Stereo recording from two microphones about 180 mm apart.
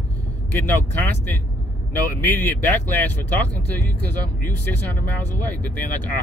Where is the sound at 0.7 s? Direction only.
10° left (ahead or behind).